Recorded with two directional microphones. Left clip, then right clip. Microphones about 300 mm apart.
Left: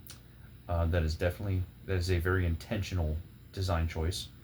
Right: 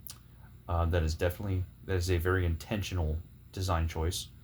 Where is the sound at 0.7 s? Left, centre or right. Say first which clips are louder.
Right 1 dB; right.